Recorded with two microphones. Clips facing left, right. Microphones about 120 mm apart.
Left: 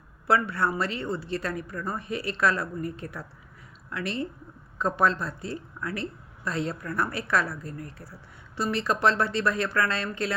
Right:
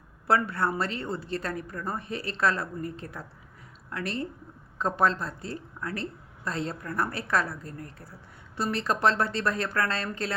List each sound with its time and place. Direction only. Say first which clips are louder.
0.3 s a woman's voice: left 1 dB; 40° right (ahead or behind)
3.8 s a woman's voice: left 1 dB; 40° right (ahead or behind)